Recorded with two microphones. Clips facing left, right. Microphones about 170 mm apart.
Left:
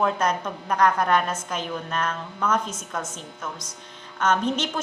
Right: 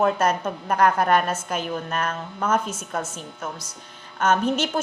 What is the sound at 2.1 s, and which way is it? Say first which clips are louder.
Speech: right 1 dB; 30° right (ahead or behind).